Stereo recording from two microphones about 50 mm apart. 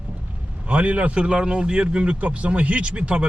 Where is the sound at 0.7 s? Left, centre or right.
Right.